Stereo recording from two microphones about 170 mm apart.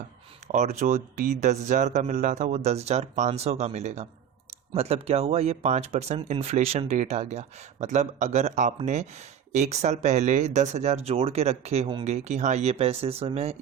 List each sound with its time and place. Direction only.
0.4 s speech: 45° right (ahead or behind)
12.1 s speech: 45° right (ahead or behind)